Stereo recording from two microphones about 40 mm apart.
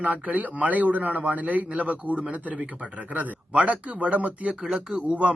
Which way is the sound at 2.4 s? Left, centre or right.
Right.